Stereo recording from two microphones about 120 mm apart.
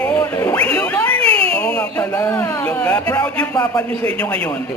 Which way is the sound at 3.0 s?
20° left (ahead or behind).